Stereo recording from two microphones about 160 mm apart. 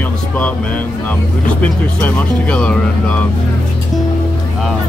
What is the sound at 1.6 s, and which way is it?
Speech, 5° left (ahead or behind).